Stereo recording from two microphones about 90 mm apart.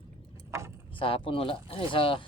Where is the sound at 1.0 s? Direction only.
75° left (ahead or behind).